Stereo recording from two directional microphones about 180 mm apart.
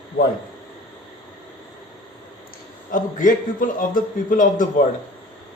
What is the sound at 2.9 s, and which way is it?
A man's voice, 45° left (ahead or behind).